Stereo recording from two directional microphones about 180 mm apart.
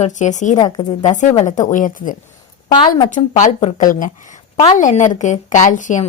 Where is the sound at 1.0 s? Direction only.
45° left (ahead or behind).